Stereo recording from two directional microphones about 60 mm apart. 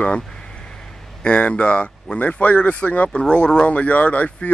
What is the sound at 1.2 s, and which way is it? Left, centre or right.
Speech, centre.